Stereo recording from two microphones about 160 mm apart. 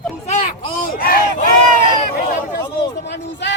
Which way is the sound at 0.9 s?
65° left (ahead or behind).